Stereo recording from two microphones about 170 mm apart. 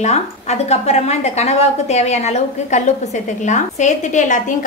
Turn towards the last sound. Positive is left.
turn(degrees=45)  # may be behind; listen again after turning